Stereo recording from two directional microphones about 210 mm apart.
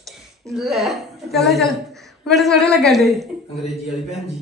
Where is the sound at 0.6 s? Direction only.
Centre (ahead or behind).